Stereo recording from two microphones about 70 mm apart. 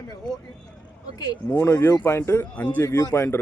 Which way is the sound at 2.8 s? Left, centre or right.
Left.